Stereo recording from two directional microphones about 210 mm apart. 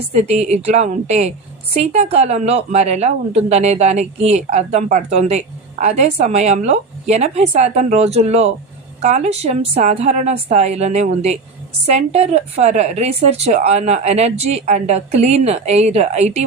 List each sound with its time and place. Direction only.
0.1 s a woman's voice: 30° right (ahead or behind)